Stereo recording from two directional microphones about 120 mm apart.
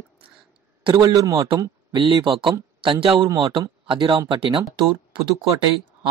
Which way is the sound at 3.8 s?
45° right (ahead or behind).